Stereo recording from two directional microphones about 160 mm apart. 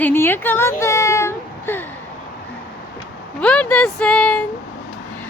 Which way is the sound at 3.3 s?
10° left (ahead or behind).